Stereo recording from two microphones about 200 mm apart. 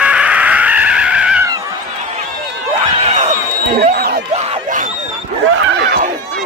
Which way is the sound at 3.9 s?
50° right (ahead or behind).